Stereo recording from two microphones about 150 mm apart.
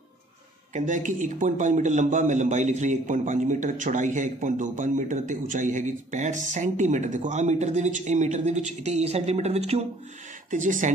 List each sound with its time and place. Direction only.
0.7 s a man's voice: 55° right (ahead or behind)
10.5 s a man's voice: 60° right (ahead or behind)